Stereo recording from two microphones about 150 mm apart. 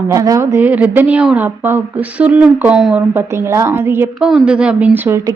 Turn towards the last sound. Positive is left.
turn(degrees=-15)  # may be behind; listen again after turning